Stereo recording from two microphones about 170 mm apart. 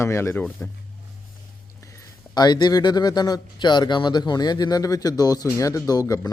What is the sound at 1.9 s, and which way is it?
A man's voice, 20° left (ahead or behind).